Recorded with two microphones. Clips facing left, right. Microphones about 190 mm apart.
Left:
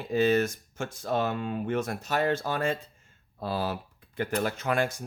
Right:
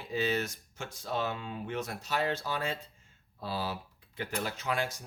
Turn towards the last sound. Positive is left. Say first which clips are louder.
# left 6 dB
turn(degrees=50)  # may be behind; listen again after turning